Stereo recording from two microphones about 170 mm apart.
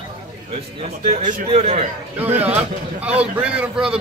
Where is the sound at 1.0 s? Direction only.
55° right (ahead or behind); by 1.8 s 35° right (ahead or behind).